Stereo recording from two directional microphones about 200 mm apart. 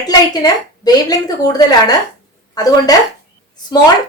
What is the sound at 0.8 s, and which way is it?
A woman's voice, 20° left (ahead or behind).